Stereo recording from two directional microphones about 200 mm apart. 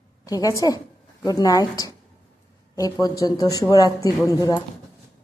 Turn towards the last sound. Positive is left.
turn(degrees=20)  # may be behind; listen again after turning